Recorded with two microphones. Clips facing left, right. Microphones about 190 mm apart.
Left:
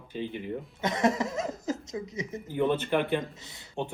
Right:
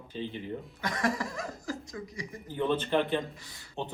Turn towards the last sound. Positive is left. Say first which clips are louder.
# left 3 dB
turn(degrees=20)  # may be behind; listen again after turning